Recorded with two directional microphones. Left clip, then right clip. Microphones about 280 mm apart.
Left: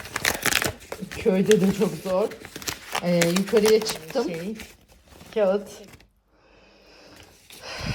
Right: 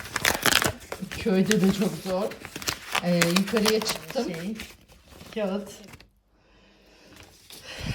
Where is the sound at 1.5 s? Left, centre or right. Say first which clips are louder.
Left 5 dB; centre.